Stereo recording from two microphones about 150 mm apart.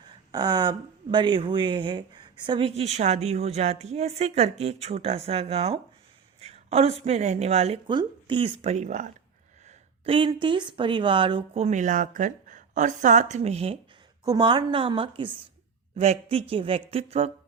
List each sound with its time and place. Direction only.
0.1 s a woman's voice: 30° right (ahead or behind); by 7.8 s 45° right (ahead or behind)
7.9 s speech: 30° right (ahead or behind); by 9.1 s 55° right (ahead or behind)
9.6 s a sound: 35° right (ahead or behind)
10.4 s speech: 30° right (ahead or behind)
14.3 s a woman's voice: 30° right (ahead or behind)